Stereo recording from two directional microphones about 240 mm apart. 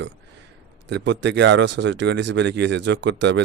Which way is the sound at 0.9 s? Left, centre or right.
Right.